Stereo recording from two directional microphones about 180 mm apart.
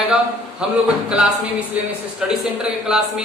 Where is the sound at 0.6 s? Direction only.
5° right (ahead or behind).